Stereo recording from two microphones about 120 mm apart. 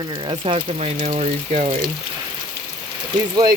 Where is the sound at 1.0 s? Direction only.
65° right (ahead or behind).